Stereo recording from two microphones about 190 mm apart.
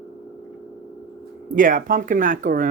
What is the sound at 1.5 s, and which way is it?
Speech, 45° right (ahead or behind).